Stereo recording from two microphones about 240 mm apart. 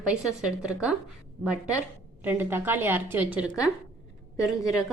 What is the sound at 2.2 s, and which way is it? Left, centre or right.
A woman's voice, centre.